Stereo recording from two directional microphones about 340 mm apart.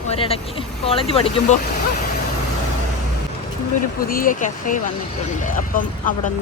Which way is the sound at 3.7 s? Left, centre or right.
Left.